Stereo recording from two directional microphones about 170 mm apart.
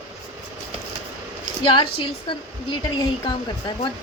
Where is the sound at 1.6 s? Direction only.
30° left (ahead or behind).